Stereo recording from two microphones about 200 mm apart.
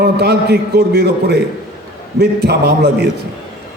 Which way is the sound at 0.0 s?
55° right (ahead or behind).